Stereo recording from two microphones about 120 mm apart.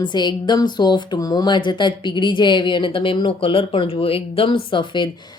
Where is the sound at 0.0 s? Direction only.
35° left (ahead or behind).